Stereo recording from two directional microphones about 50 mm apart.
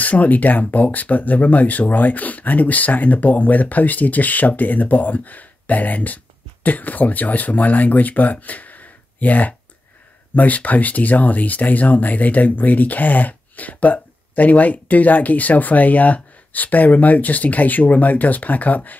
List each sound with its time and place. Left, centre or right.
0.0 s speech: left